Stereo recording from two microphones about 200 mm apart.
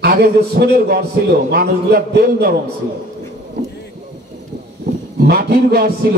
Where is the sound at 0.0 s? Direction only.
50° right (ahead or behind).